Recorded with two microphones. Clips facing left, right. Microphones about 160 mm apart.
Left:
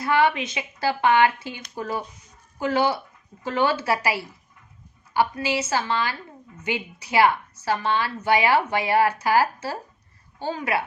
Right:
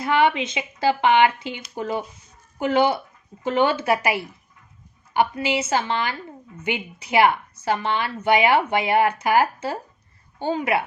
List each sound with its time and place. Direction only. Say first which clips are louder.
0.0 s a woman's voice: right 1 dB; 20° right (ahead or behind)